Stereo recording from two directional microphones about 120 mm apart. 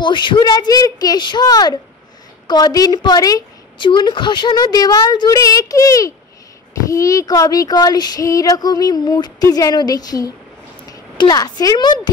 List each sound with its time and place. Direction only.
0.0 s a woman's voice: 40° left (ahead or behind)